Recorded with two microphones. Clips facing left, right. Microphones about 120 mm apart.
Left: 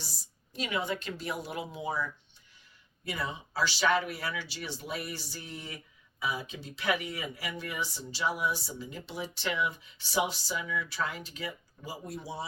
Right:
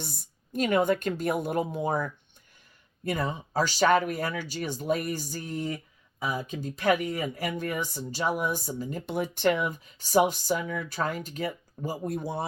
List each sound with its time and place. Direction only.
0.0 s speech: 55° right (ahead or behind)